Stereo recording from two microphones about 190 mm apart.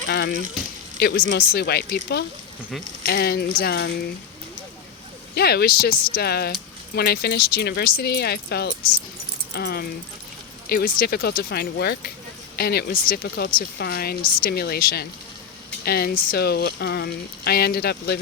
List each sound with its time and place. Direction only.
0.1 s speech: 60° left (ahead or behind)
5.3 s speech: 55° left (ahead or behind)